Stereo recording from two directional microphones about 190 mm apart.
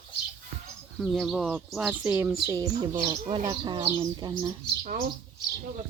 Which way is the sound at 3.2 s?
25° right (ahead or behind).